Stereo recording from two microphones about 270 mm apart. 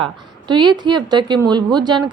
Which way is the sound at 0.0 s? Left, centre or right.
Centre.